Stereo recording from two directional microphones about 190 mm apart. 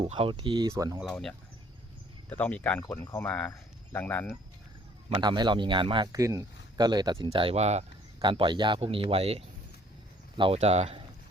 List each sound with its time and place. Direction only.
0.0 s speech: 30° right (ahead or behind)
0.9 s speech: centre (ahead or behind)
5.2 s speech: 25° right (ahead or behind)